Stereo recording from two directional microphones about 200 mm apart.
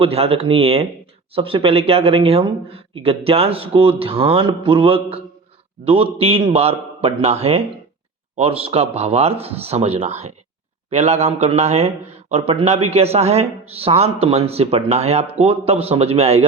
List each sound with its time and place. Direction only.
0.0 s a man's voice: 30° right (ahead or behind)